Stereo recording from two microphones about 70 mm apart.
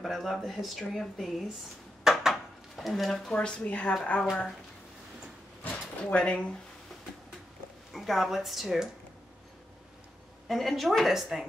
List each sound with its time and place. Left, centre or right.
0.0 s speech: centre
2.0 s dishes: centre
3.3 s speech: centre
4.3 s speech: centre
5.6 s a sound: left
6.1 s speech: centre
7.9 s speech: centre
10.5 s speech: centre